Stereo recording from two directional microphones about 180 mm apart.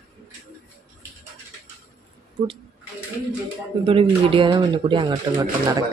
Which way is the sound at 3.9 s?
30° right (ahead or behind).